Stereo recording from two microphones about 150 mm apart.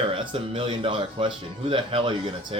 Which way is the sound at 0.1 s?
35° right (ahead or behind).